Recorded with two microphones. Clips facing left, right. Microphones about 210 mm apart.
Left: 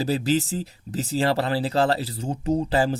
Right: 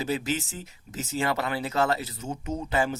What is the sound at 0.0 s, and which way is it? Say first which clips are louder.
Speech: left 6 dB; 35° left (ahead or behind).